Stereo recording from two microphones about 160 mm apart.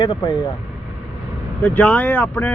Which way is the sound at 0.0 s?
25° left (ahead or behind).